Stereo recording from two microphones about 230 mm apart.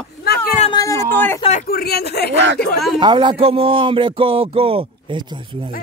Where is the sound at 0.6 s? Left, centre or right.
Centre.